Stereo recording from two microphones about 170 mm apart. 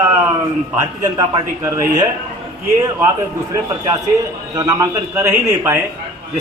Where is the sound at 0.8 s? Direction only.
20° right (ahead or behind).